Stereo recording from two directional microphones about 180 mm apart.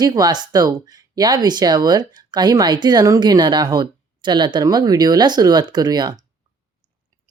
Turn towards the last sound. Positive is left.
turn(degrees=-20)  # may be behind; listen again after turning